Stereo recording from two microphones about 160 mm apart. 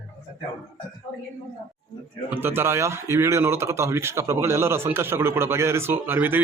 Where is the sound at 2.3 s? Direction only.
15° right (ahead or behind).